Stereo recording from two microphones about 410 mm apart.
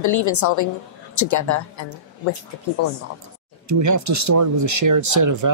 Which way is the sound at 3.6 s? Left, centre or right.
Right.